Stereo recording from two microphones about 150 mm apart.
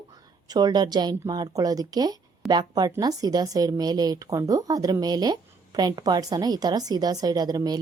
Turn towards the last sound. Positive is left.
turn(degrees=-25)  # may be behind; listen again after turning